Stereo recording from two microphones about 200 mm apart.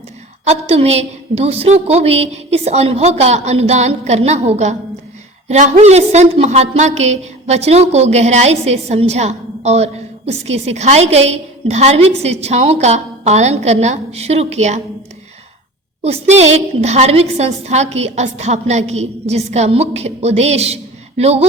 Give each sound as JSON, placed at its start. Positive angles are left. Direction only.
{"t": 0.4, "sound": "a woman's voice", "side_deg": -35}
{"t": 16.0, "sound": "a woman's voice", "side_deg": -30}